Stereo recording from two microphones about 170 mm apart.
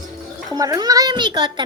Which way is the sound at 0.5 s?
20° right (ahead or behind).